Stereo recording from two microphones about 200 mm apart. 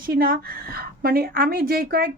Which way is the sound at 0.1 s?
50° right (ahead or behind).